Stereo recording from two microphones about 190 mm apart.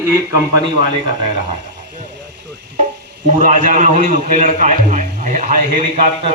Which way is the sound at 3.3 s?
40° right (ahead or behind).